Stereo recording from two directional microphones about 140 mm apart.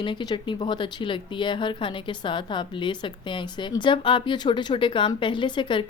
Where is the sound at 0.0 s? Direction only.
35° left (ahead or behind).